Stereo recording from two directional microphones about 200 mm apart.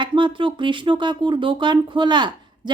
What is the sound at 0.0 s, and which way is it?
A woman's voice, 25° right (ahead or behind).